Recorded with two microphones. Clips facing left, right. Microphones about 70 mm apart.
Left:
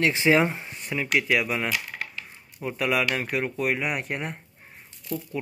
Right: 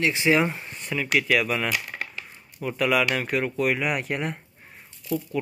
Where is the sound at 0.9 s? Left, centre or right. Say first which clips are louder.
Right 1 dB; centre.